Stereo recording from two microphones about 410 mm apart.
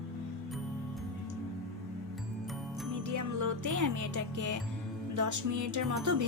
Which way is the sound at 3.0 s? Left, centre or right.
Right.